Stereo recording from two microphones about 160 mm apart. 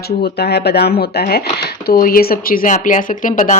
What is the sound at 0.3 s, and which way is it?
Speech, 90° left.